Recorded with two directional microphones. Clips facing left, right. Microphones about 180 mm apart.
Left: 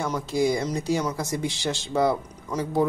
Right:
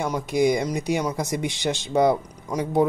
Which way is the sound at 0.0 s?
15° right (ahead or behind).